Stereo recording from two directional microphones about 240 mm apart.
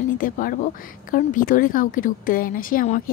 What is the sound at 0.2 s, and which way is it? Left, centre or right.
A woman's voice, left.